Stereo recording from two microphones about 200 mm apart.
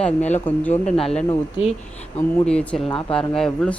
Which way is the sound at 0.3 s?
10° left (ahead or behind).